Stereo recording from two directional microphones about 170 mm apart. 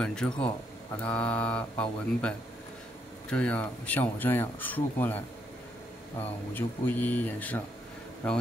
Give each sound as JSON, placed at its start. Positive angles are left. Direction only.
{"t": 0.0, "sound": "speech", "side_deg": 5}
{"t": 6.2, "sound": "speech", "side_deg": 10}